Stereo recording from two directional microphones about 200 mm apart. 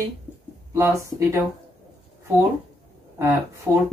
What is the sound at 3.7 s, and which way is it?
Speech, 10° right (ahead or behind).